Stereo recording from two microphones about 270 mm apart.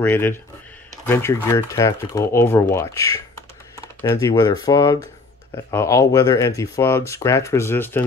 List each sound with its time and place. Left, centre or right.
0.0 s speech: centre